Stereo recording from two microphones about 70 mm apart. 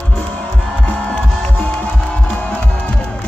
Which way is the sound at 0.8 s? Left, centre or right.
Centre.